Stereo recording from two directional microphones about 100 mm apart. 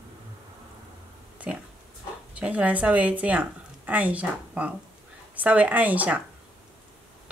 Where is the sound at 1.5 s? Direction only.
10° right (ahead or behind).